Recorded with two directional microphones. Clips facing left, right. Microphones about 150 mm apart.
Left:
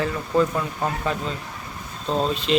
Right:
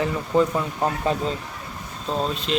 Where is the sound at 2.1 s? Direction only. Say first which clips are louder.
Left 2 dB; centre (ahead or behind).